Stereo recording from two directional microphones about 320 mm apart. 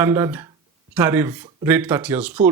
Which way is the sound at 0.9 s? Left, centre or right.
Centre.